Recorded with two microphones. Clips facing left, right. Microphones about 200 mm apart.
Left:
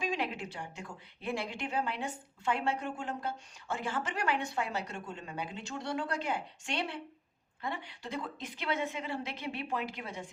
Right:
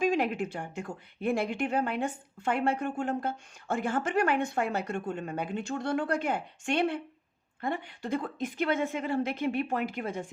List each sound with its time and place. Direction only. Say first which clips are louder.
0.0 s speech: right 8 dB; 50° right (ahead or behind)